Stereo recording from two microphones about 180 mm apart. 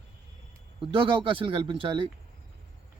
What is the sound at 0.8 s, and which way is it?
A man's voice, 25° right (ahead or behind).